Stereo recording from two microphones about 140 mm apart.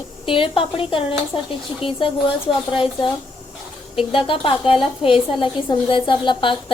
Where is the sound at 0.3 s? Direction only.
40° left (ahead or behind).